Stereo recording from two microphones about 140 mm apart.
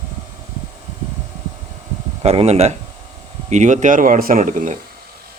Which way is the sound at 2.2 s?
50° right (ahead or behind).